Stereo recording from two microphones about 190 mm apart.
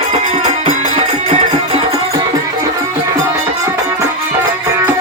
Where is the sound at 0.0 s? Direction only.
35° right (ahead or behind).